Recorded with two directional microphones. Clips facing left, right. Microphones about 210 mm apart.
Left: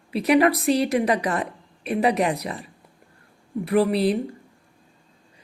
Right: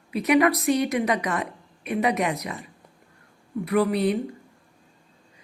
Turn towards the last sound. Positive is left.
turn(degrees=30)  # may be behind; listen again after turning